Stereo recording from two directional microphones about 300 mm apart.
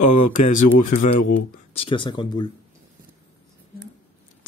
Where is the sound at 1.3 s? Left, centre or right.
Centre.